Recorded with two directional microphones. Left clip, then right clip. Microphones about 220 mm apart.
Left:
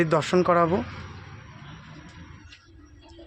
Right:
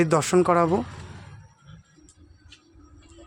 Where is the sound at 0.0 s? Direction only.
15° right (ahead or behind).